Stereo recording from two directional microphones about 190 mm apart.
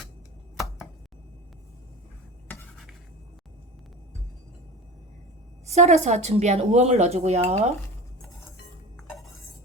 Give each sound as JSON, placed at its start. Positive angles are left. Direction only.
{"t": 0.5, "sound": "chopping", "side_deg": 0}
{"t": 5.6, "sound": "speech", "side_deg": -35}
{"t": 9.0, "sound": "dishes", "side_deg": 0}